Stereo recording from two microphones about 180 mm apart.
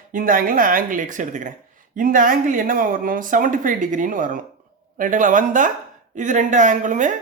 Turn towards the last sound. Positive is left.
turn(degrees=-45)  # may be behind; listen again after turning